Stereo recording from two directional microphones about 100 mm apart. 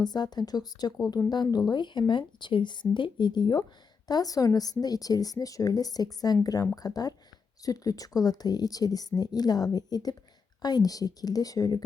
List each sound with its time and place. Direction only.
0.0 s speech: 45° left (ahead or behind)
4.1 s a woman's voice: 40° left (ahead or behind)